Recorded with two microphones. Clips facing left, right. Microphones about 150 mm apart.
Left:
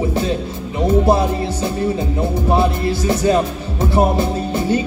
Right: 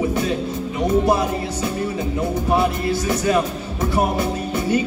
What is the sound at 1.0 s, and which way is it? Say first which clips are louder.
Music: left 3 dB; 30° left (ahead or behind).